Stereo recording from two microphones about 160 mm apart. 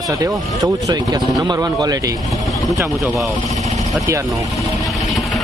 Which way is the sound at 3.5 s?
45° right (ahead or behind).